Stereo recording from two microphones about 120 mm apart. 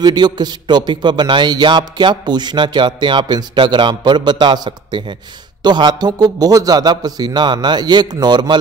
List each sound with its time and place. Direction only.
0.0 s a man's voice: 35° right (ahead or behind)